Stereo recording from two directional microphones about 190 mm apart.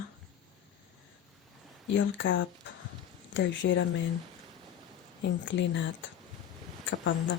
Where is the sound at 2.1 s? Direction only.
70° left (ahead or behind).